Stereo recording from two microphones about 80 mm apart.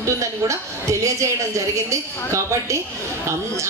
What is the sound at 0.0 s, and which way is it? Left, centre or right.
Speech, right.